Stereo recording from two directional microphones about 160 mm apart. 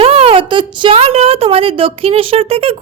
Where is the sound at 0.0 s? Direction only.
35° right (ahead or behind).